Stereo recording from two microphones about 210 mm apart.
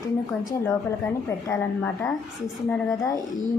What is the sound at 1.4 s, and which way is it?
Speech, 10° left (ahead or behind).